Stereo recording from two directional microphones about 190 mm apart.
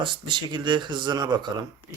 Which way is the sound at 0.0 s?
25° right (ahead or behind).